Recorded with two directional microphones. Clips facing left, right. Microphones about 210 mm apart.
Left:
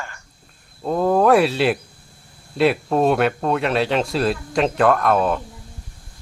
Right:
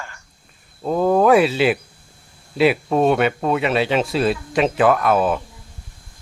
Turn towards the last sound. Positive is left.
turn(degrees=-5)  # may be behind; listen again after turning